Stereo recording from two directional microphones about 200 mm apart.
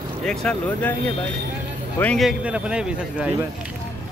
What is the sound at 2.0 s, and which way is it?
A man's voice, 5° left (ahead or behind).